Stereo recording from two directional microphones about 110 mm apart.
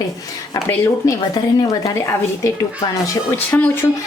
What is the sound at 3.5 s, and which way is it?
Speech, 15° left (ahead or behind).